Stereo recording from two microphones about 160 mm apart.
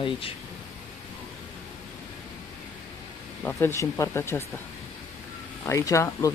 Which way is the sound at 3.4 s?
15° left (ahead or behind).